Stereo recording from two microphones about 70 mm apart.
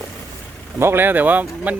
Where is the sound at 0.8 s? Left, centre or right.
Right.